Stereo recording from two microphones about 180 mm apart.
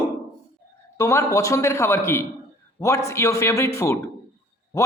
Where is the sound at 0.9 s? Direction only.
15° left (ahead or behind).